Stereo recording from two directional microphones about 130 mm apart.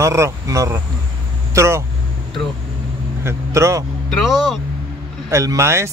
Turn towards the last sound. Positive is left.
turn(degrees=-20)  # may be behind; listen again after turning